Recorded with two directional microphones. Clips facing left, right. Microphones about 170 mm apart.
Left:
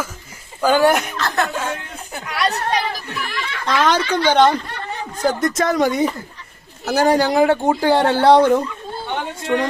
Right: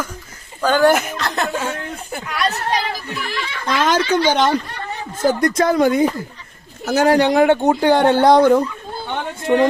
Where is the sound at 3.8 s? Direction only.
10° right (ahead or behind).